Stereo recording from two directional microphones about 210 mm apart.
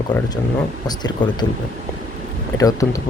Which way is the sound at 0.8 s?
20° left (ahead or behind).